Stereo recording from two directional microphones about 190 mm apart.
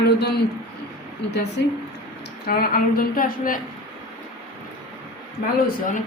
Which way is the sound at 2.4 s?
50° left (ahead or behind).